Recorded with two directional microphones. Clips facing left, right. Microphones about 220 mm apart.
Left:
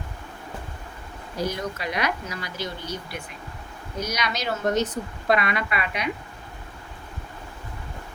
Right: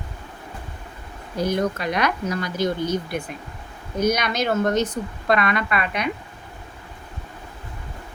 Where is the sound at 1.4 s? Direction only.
50° right (ahead or behind).